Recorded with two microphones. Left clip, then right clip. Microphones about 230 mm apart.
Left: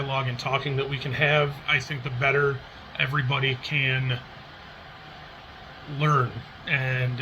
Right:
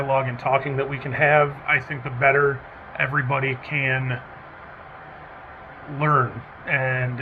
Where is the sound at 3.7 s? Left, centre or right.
Left.